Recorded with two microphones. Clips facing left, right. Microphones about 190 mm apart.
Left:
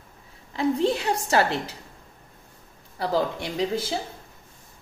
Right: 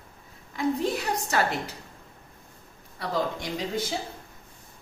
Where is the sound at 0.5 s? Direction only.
30° left (ahead or behind).